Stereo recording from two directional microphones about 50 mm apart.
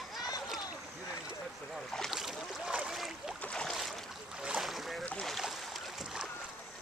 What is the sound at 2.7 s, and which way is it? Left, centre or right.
Boat, centre.